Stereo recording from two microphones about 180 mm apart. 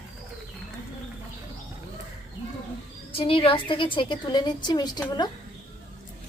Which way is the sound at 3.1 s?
30° left (ahead or behind).